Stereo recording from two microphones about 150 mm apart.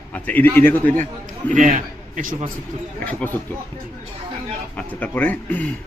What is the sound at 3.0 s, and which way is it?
Speech, 10° left (ahead or behind).